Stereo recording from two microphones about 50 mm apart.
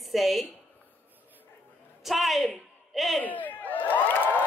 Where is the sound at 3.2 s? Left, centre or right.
Left.